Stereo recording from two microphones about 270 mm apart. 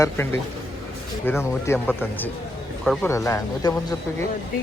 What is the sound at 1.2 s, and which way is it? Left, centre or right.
Speech, centre.